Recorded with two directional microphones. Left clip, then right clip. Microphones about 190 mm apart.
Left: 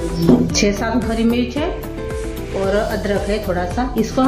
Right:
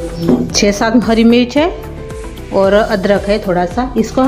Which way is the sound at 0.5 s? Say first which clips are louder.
Right 6 dB; 55° right (ahead or behind).